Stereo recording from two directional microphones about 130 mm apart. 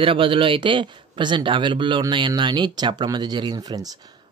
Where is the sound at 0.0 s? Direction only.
40° right (ahead or behind).